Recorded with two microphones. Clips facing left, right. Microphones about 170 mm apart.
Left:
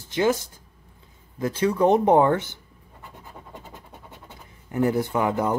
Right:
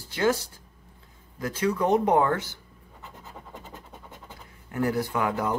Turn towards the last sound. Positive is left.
turn(degrees=20)  # may be behind; listen again after turning